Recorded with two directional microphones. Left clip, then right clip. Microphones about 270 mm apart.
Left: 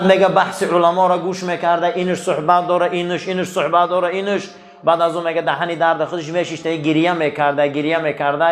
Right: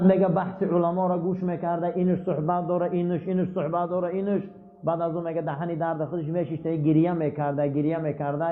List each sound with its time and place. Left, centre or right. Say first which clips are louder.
0.0 s a man's voice: left 10 dB; centre